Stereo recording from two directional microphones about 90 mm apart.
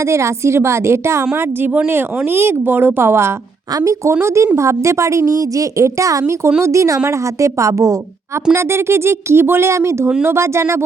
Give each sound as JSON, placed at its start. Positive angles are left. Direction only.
{"t": 0.1, "sound": "a woman's voice", "side_deg": -35}